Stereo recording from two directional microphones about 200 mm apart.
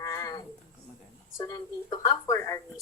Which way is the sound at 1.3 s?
20° left (ahead or behind).